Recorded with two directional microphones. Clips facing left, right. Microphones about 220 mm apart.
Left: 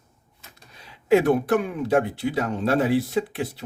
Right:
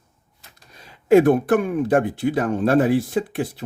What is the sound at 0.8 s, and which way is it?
Speech, 45° right (ahead or behind).